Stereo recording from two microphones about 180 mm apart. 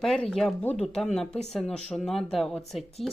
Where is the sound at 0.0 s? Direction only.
5° left (ahead or behind).